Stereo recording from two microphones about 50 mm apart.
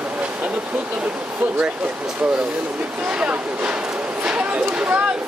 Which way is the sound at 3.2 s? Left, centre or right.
Right.